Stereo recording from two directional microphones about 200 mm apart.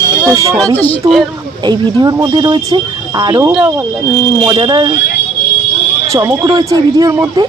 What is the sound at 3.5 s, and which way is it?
Speech, centre (ahead or behind).